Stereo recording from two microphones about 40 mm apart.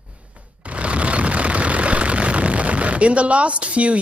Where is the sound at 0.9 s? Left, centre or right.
Right.